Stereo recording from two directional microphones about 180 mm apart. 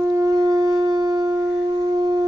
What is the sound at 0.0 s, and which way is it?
Shofar, 20° right (ahead or behind).